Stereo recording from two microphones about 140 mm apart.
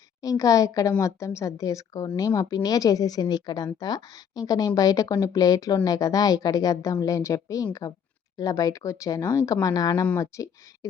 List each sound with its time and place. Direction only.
0.2 s a woman's voice: 25° left (ahead or behind)